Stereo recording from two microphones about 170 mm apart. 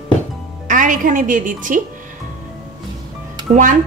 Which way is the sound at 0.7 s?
50° right (ahead or behind).